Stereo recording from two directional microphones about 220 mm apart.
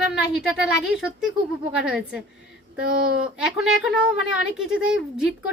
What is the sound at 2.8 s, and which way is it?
Speech, 40° right (ahead or behind).